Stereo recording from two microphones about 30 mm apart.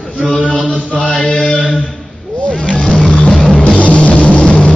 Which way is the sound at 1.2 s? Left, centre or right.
Left.